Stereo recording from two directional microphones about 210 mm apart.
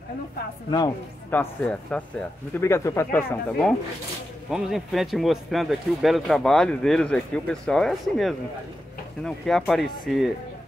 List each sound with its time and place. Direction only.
0.7 s speech: 20° left (ahead or behind)
1.3 s speech: 5° left (ahead or behind)